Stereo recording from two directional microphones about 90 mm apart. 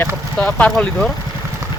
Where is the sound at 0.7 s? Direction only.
5° left (ahead or behind).